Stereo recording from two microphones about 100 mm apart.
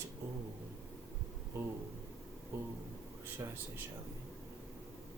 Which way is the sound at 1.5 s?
25° right (ahead or behind).